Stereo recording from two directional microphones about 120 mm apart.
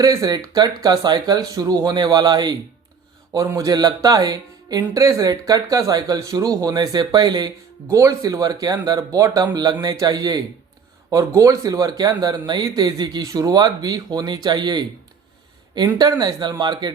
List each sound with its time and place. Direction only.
0.0 s speech: 30° right (ahead or behind)
7.9 s speech: 25° right (ahead or behind)
16.0 s speech: 35° right (ahead or behind)